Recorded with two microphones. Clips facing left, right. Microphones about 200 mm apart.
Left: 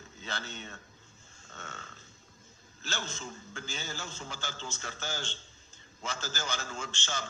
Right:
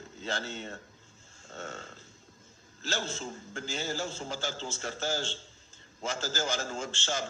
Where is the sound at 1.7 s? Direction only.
30° right (ahead or behind).